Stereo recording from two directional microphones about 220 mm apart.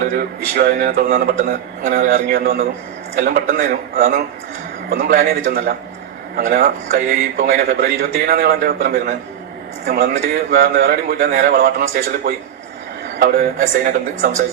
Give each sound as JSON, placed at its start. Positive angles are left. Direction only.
{"t": 0.1, "sound": "a man's voice", "side_deg": -45}